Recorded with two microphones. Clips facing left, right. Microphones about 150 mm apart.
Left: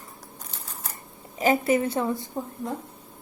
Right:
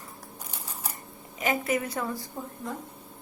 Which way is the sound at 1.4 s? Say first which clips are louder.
Left 6 dB; 30° left (ahead or behind).